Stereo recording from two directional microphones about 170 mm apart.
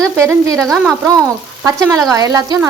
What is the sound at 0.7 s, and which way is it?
Speech, centre (ahead or behind).